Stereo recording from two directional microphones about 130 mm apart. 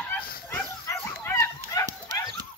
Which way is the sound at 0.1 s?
15° left (ahead or behind).